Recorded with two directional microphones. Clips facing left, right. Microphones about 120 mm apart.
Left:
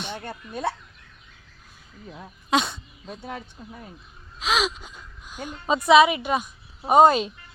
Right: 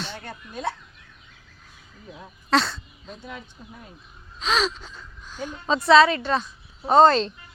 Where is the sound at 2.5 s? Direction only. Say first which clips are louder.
Right 1 dB; 15° left (ahead or behind).